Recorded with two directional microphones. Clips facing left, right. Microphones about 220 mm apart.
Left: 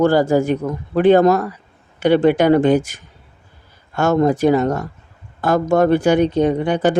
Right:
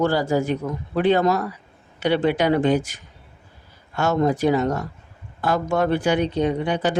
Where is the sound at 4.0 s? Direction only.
50° left (ahead or behind).